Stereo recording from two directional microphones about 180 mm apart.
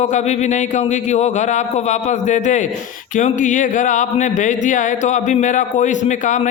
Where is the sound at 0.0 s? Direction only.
40° left (ahead or behind).